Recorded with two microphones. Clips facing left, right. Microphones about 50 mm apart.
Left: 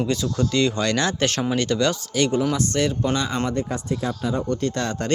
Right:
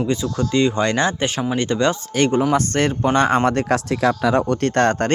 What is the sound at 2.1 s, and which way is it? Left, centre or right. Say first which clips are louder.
Speech: right 5 dB; right.